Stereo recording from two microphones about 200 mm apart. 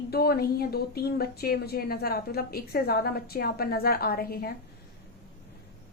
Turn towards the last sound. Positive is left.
turn(degrees=50)  # may be behind; listen again after turning